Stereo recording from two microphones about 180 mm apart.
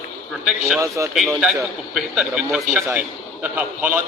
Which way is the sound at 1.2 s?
Centre (ahead or behind).